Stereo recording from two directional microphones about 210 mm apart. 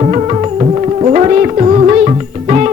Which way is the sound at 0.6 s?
30° right (ahead or behind).